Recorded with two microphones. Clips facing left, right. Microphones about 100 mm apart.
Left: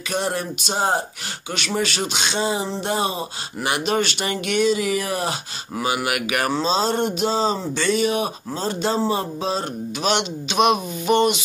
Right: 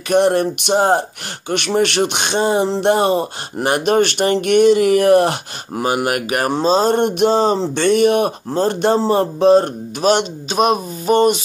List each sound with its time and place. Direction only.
0.1 s speech: 60° right (ahead or behind)
5.8 s speech: 45° right (ahead or behind)